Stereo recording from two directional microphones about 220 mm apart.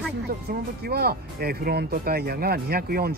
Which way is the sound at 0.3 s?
45° right (ahead or behind).